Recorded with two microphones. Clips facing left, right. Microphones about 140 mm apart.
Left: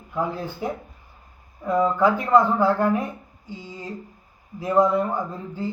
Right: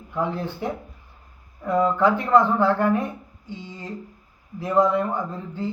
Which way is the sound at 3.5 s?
20° right (ahead or behind).